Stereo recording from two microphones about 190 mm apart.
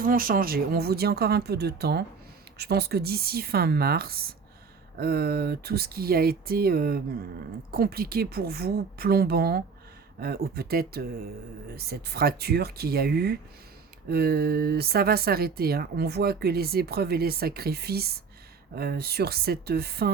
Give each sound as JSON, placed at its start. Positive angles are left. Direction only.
{"t": 0.0, "sound": "speech", "side_deg": -50}